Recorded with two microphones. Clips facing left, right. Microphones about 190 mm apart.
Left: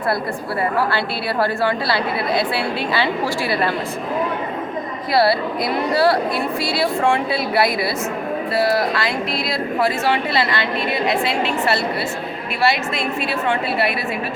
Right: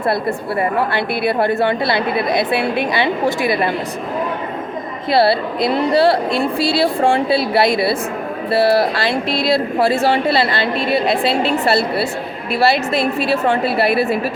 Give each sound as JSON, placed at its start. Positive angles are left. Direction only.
{"t": 0.8, "sound": "speech", "side_deg": -20}
{"t": 5.1, "sound": "speech", "side_deg": -25}